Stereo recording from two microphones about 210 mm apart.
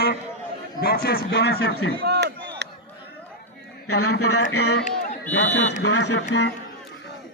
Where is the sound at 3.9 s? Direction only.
90° left.